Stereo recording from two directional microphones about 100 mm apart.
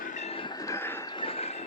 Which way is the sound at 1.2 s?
85° left.